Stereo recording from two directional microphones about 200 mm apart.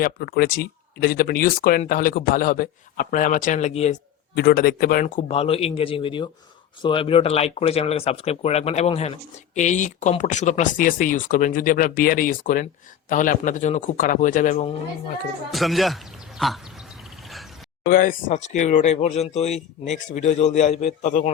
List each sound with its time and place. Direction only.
0.0 s a man's voice: 45° left (ahead or behind)
4.4 s a man's voice: 50° left (ahead or behind)
5.3 s a man's voice: 30° left (ahead or behind)
15.5 s a man's voice: centre (ahead or behind)
17.2 s a sound: centre (ahead or behind)
17.8 s speech: 45° left (ahead or behind)